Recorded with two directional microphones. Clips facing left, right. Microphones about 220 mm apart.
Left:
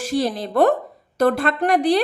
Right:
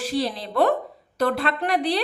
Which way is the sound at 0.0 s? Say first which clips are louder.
Left 4 dB; 45° left (ahead or behind).